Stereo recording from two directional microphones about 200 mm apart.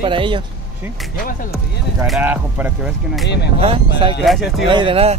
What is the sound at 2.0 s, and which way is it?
Speech, 5° right (ahead or behind).